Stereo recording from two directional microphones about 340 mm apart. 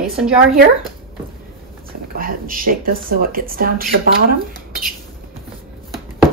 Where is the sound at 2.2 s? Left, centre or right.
Right.